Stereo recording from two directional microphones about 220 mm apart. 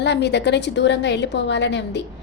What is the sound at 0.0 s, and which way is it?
A woman's voice, 50° left (ahead or behind).